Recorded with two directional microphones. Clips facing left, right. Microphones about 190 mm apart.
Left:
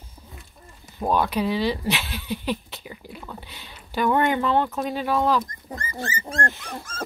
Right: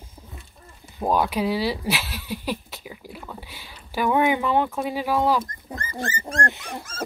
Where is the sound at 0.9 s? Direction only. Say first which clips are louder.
Even; 10° right (ahead or behind).